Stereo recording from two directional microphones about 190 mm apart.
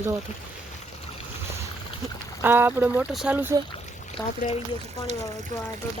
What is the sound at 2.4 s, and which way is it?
Speech, 10° right (ahead or behind).